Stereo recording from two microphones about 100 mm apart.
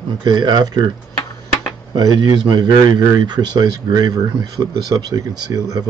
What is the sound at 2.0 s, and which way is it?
Speech, 40° right (ahead or behind).